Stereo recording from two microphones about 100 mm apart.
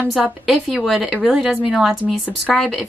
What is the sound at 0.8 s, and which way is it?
Speech, centre (ahead or behind).